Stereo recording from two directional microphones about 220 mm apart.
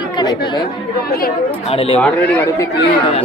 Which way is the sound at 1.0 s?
45° left (ahead or behind).